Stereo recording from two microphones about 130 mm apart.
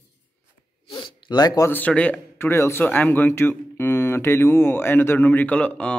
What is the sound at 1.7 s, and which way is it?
Speech, 10° left (ahead or behind).